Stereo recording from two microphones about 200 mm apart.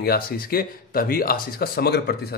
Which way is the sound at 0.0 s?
50° left (ahead or behind).